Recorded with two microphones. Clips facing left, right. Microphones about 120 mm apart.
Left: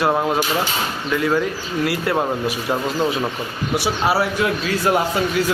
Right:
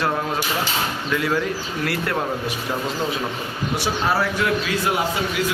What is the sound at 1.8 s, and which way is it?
Speech, 5° left (ahead or behind).